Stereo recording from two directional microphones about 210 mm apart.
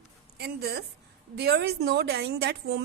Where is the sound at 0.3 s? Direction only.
50° right (ahead or behind).